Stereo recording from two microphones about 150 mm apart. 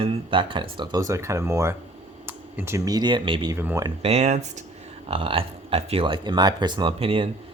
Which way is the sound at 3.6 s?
15° right (ahead or behind).